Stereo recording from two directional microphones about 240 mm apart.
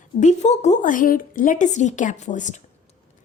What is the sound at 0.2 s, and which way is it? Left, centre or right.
A woman's voice, left.